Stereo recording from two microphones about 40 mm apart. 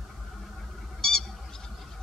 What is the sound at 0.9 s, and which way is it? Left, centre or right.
Bird, centre.